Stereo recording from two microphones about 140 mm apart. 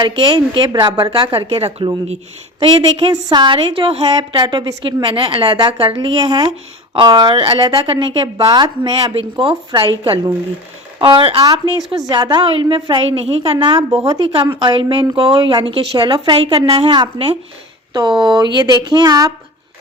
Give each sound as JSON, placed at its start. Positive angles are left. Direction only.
{"t": 0.0, "sound": "a woman's voice", "side_deg": -35}
{"t": 11.9, "sound": "a woman's voice", "side_deg": -25}